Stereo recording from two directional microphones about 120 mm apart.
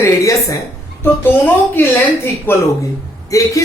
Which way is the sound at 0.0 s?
25° left (ahead or behind).